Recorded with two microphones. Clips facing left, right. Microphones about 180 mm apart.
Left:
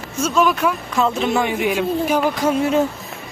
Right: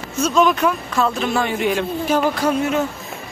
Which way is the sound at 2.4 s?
20° left (ahead or behind).